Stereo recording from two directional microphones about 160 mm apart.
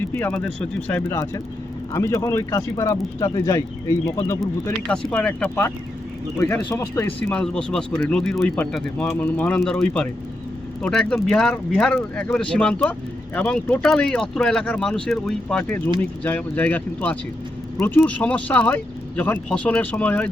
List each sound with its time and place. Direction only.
0.1 s speech: 10° left (ahead or behind)
4.9 s speech: 5° left (ahead or behind)
7.3 s speech: 5° left (ahead or behind)